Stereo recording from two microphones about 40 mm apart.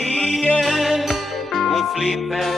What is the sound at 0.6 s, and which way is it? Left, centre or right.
Music, centre.